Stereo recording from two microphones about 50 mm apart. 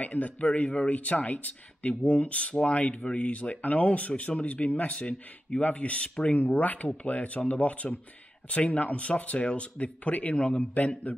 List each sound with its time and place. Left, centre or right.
0.0 s speech: left